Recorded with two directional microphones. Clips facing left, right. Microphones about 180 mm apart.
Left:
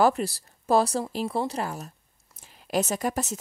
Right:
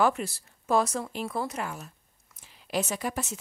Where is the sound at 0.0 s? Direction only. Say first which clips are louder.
Left 3 dB; 35° left (ahead or behind).